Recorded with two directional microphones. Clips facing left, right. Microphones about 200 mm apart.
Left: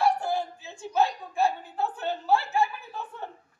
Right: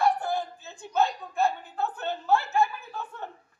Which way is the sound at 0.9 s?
10° left (ahead or behind).